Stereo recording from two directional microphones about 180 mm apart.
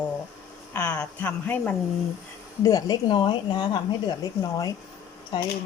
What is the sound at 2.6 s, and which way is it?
A woman's voice, 20° left (ahead or behind).